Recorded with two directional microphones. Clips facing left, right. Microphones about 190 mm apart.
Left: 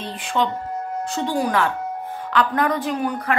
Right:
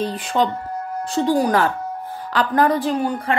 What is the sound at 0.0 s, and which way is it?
A woman's voice, 40° right (ahead or behind).